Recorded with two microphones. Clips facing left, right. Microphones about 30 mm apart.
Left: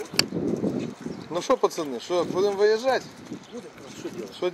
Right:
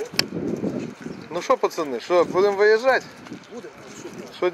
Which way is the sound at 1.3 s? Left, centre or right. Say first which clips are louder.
Right 2 dB; centre.